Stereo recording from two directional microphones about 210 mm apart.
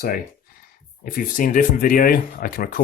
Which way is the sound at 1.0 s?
40° left (ahead or behind).